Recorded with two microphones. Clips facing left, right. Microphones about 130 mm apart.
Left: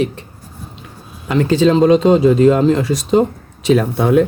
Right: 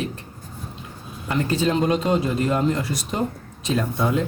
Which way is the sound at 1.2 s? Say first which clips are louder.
Left 9 dB; 90° left.